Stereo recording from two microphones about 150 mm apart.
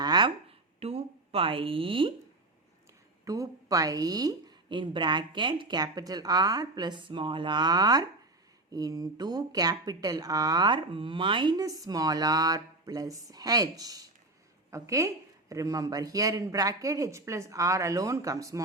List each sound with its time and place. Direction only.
0.0 s a sound: 30° right (ahead or behind)
0.8 s a woman's voice: 40° right (ahead or behind)
3.2 s speech: 20° right (ahead or behind)